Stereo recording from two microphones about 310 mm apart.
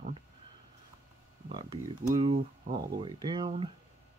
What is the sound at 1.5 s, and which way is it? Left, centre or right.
Speech, centre.